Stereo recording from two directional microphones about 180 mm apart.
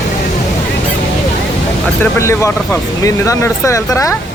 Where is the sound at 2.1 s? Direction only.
15° left (ahead or behind).